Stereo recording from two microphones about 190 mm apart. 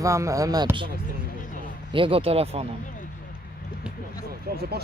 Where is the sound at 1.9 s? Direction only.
30° right (ahead or behind).